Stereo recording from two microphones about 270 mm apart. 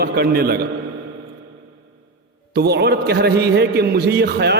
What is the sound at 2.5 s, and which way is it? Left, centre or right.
A man's voice, right.